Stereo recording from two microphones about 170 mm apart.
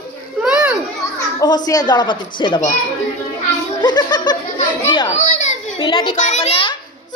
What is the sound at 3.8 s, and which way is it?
Speech, 25° left (ahead or behind).